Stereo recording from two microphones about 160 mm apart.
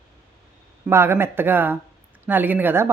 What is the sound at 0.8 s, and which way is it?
Speech, 15° right (ahead or behind).